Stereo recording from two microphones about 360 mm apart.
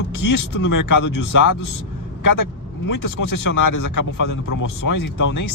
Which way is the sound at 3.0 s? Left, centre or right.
Left.